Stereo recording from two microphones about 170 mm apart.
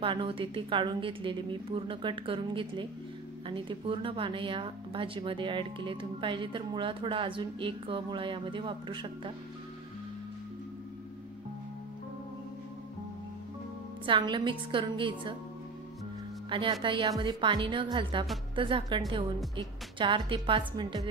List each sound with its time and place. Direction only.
0.0 s a woman's voice: 30° right (ahead or behind)
14.0 s a woman's voice: 30° right (ahead or behind)
16.4 s a woman's voice: 30° right (ahead or behind)